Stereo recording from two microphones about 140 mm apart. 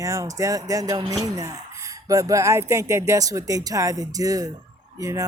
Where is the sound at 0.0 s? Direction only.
25° right (ahead or behind).